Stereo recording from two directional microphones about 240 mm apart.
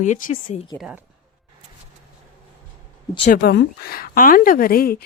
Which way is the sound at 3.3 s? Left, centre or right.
Left.